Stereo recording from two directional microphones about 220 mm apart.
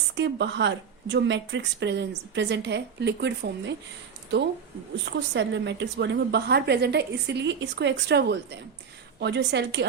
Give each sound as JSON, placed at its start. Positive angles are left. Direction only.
{"t": 0.2, "sound": "a woman's voice", "side_deg": -55}
{"t": 5.0, "sound": "a woman's voice", "side_deg": -50}